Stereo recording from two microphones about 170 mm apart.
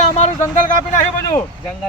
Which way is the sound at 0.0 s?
45° left (ahead or behind).